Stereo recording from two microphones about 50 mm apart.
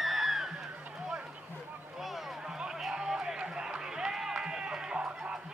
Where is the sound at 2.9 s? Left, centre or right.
Centre.